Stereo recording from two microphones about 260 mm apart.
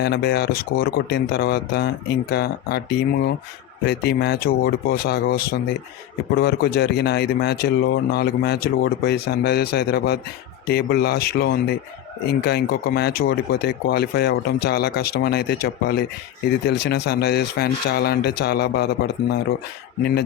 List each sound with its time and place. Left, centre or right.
0.0 s a man's voice: left